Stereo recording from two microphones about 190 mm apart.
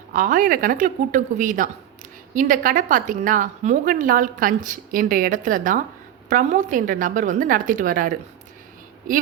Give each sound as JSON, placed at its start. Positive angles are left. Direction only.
{"t": 0.1, "sound": "a woman's voice", "side_deg": -45}